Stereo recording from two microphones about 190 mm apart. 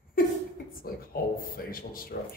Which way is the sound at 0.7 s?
50° left (ahead or behind).